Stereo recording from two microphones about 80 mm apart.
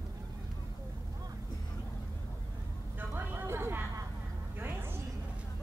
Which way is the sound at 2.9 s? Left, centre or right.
Right.